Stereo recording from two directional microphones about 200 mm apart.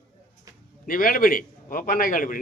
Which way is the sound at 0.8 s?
45° left (ahead or behind).